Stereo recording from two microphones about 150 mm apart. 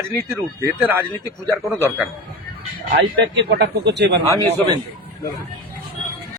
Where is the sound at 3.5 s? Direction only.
90° right.